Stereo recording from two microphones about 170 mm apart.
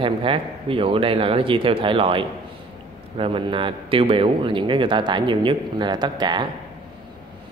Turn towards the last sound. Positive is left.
turn(degrees=-25)  # may be behind; listen again after turning